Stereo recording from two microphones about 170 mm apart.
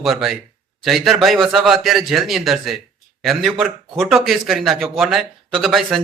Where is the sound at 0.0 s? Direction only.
Centre (ahead or behind).